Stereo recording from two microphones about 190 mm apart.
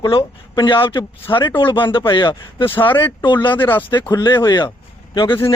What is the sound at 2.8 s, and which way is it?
Speech, 10° left (ahead or behind).